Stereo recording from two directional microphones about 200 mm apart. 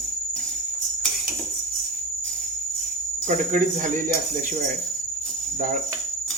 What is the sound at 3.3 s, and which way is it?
Speech, 40° right (ahead or behind).